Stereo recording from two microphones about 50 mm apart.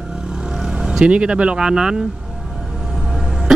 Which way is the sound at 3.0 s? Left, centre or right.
Centre.